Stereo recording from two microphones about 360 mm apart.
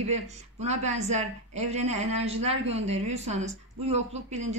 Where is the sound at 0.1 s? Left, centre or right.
Centre.